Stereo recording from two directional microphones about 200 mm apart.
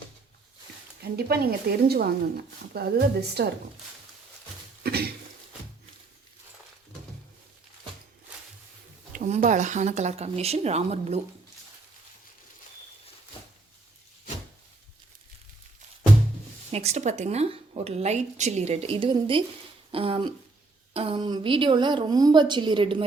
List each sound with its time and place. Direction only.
1.1 s a woman's voice: 50° right (ahead or behind)
4.8 s throat clearing: 50° right (ahead or behind)
9.1 s a woman's voice: 40° right (ahead or behind)
16.7 s a woman's voice: 35° right (ahead or behind)